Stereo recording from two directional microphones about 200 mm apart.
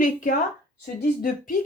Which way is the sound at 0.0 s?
45° left (ahead or behind).